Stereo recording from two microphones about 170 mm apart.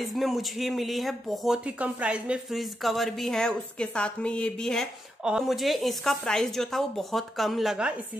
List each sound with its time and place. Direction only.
0.0 s speech: centre (ahead or behind)